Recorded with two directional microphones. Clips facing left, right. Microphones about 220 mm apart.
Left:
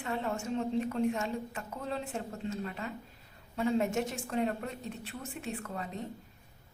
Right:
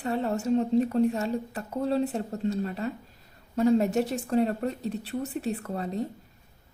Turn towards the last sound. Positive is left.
turn(degrees=-35)  # may be behind; listen again after turning